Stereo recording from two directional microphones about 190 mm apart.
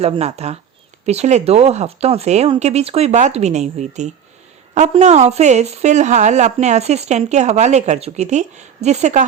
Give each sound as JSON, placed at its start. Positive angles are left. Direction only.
{"t": 0.0, "sound": "a woman's voice", "side_deg": -35}